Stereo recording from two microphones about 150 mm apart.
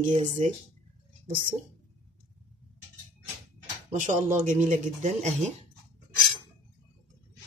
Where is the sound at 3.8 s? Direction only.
50° right (ahead or behind).